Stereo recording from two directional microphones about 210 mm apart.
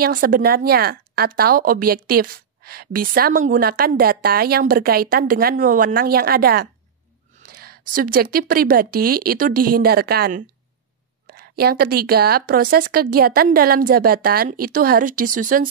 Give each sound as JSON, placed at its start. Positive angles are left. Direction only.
{"t": 0.0, "sound": "a woman's voice", "side_deg": -40}